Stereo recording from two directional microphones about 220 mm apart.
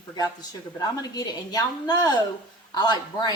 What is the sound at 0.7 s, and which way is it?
A woman's voice, 15° left (ahead or behind).